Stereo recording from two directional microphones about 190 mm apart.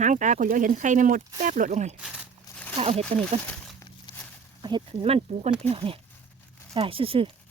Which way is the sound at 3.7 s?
20° left (ahead or behind).